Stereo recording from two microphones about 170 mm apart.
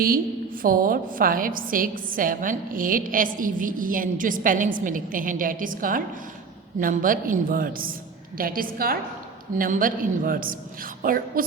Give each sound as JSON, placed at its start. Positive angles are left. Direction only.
{"t": 0.6, "sound": "a woman's voice", "side_deg": -55}